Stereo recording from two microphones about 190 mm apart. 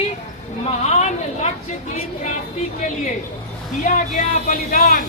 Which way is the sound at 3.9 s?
40° left (ahead or behind).